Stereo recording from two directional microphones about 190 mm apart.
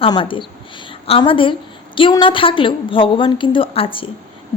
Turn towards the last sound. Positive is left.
turn(degrees=30)  # may be behind; listen again after turning